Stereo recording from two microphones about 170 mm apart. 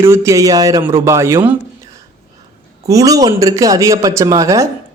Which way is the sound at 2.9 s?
20° right (ahead or behind).